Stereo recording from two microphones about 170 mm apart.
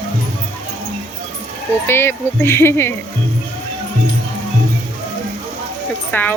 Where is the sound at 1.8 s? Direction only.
15° left (ahead or behind).